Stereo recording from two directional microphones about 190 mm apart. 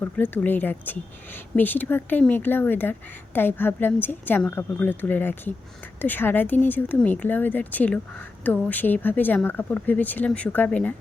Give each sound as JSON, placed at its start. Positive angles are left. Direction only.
{"t": 0.0, "sound": "speech", "side_deg": 10}